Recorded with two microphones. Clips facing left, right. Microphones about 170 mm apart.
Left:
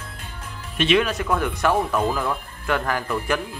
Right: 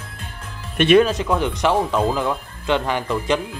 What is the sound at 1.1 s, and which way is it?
Speech, 20° right (ahead or behind).